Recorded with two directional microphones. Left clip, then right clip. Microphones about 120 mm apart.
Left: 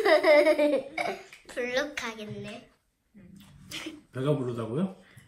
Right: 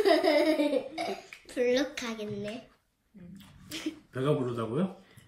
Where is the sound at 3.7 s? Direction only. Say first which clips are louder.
Right 1 dB; 10° left (ahead or behind).